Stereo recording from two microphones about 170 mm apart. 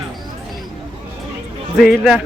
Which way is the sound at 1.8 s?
Centre (ahead or behind).